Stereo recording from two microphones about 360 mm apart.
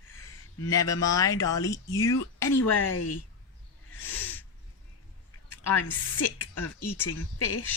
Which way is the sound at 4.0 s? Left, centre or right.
Centre.